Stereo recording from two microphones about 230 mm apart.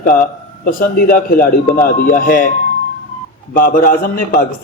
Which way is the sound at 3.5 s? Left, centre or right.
Left.